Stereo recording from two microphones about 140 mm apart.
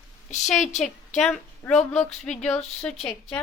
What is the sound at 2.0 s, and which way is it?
Speech, 55° left (ahead or behind).